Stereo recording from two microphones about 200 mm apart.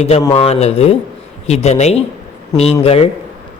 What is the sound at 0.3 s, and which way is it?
A man's voice, 30° left (ahead or behind).